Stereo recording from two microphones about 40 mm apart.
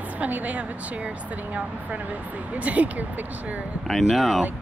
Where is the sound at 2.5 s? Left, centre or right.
Right.